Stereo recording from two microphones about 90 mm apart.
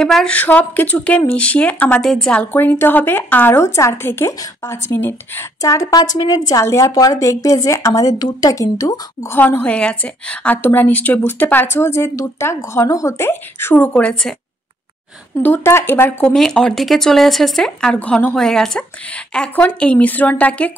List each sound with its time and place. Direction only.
0.0 s speech: 5° left (ahead or behind)
0.4 s speech: 20° left (ahead or behind)
2.0 s speech: 5° left (ahead or behind)
2.5 s a woman's voice: 25° left (ahead or behind)
5.6 s a woman's voice: 40° left (ahead or behind)
9.3 s a woman's voice: 20° left (ahead or behind); by 13.3 s 35° left (ahead or behind)
13.3 s a woman's voice: 25° left (ahead or behind)
13.9 s speech: 15° left (ahead or behind)
15.4 s a woman's voice: 25° left (ahead or behind)
16.3 s speech: 5° left (ahead or behind)
18.3 s speech: 5° left (ahead or behind)